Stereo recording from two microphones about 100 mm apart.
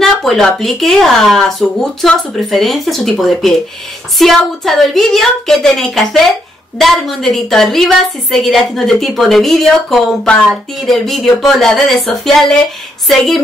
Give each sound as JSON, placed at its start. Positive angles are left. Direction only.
{"t": 0.0, "sound": "a woman's voice", "side_deg": 5}